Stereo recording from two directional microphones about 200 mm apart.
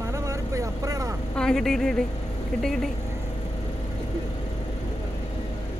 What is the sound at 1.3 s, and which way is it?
Speech, 5° left (ahead or behind).